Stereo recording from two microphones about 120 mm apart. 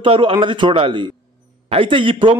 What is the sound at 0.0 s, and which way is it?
A man's voice, 50° right (ahead or behind).